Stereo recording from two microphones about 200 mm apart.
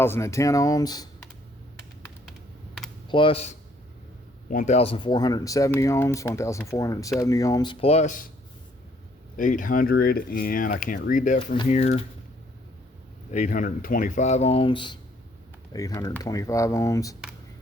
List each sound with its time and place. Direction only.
0.0 s speech: 15° left (ahead or behind)
3.1 s speech: 25° left (ahead or behind)
4.4 s speech: 40° left (ahead or behind)
9.4 s speech: 40° left (ahead or behind)
13.3 s speech: 40° left (ahead or behind); by 17.2 s 15° left (ahead or behind)